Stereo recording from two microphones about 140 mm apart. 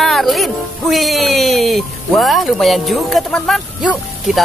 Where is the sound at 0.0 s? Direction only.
Centre (ahead or behind).